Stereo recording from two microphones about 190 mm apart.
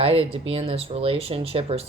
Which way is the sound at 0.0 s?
30° right (ahead or behind).